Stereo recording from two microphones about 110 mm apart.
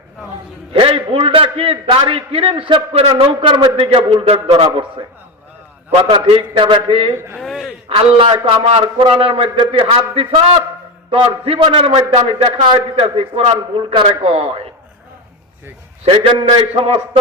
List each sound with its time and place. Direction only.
0.7 s a man's voice: 55° right (ahead or behind)
7.3 s a sound: centre (ahead or behind)
7.9 s a man's voice: 55° right (ahead or behind)
8.4 s a man's voice: 65° right (ahead or behind)
8.8 s a man's voice: 50° right (ahead or behind)
16.0 s a man's voice: 55° right (ahead or behind)